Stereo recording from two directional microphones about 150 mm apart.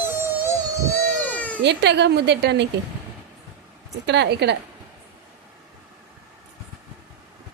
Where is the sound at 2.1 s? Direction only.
90° right.